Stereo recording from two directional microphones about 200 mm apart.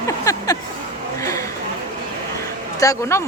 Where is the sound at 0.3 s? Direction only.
20° left (ahead or behind).